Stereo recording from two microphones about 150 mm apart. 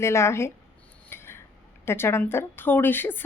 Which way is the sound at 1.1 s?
15° left (ahead or behind).